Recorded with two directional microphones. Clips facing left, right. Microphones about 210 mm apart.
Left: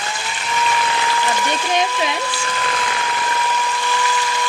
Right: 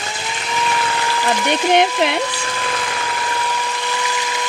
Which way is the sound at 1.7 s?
65° right (ahead or behind).